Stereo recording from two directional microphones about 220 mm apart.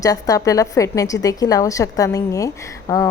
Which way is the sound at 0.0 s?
15° left (ahead or behind).